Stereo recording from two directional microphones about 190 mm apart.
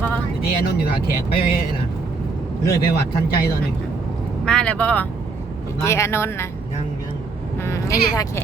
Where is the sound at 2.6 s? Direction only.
55° left (ahead or behind).